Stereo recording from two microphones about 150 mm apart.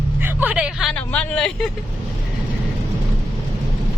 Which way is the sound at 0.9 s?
10° left (ahead or behind).